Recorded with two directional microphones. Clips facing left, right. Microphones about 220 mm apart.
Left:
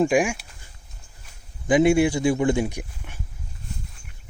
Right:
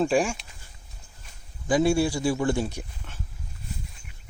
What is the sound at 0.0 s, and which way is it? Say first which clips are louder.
Speech: left 3 dB; 15° left (ahead or behind).